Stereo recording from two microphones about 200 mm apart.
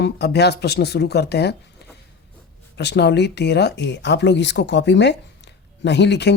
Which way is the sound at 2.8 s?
60° left (ahead or behind).